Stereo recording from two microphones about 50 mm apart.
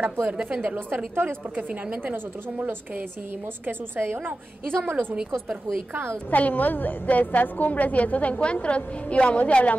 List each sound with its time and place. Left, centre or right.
0.0 s a woman's voice: right
0.7 s a woman's voice: right
3.6 s a woman's voice: right
6.3 s a woman's voice: left